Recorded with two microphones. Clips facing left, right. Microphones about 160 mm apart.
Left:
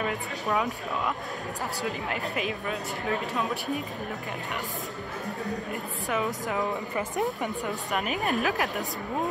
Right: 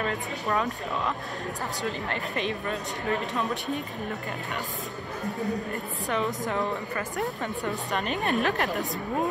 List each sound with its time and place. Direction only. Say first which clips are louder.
0.0 s speech: right 1 dB; 5° left (ahead or behind)
1.9 s speech: even; 5° left (ahead or behind)
5.7 s speech: right 1 dB; centre (ahead or behind)
7.0 s speech: left 2 dB; 20° left (ahead or behind)
7.6 s speech: right 3 dB; 5° left (ahead or behind)